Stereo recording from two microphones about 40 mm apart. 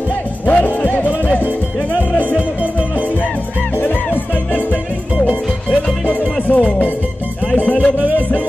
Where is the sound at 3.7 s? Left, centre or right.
Left.